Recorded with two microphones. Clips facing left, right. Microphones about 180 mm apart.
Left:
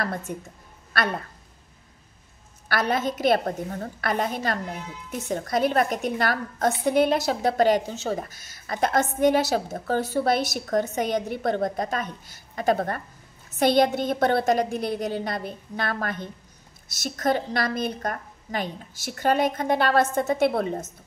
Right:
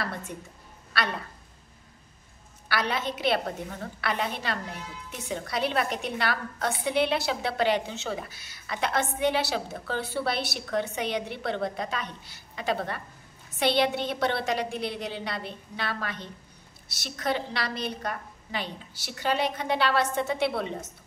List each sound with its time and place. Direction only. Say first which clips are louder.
0.0 s a woman's voice: left 5 dB; 45° left (ahead or behind)
2.7 s a woman's voice: left 5 dB; 45° left (ahead or behind)